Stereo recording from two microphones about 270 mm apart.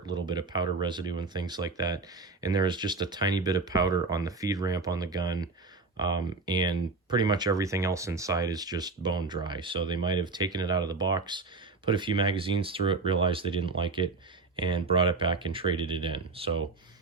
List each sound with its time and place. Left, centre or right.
0.0 s speech: centre